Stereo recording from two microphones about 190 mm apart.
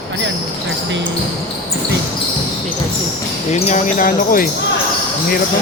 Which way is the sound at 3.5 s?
40° left (ahead or behind).